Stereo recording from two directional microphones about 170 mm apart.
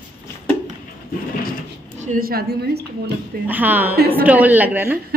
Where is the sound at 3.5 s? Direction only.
10° right (ahead or behind).